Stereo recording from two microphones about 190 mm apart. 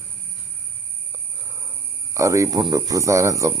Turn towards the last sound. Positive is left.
turn(degrees=-15)  # may be behind; listen again after turning